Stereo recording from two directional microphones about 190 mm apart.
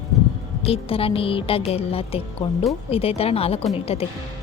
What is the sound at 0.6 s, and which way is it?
A woman's voice, 30° left (ahead or behind).